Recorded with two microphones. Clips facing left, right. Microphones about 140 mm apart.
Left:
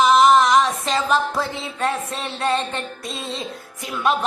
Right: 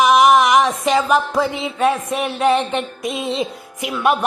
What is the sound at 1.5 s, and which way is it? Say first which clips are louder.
Music: right 6 dB; 20° right (ahead or behind).